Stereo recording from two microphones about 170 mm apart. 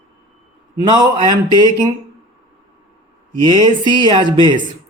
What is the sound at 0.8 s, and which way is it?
Speech, 25° right (ahead or behind).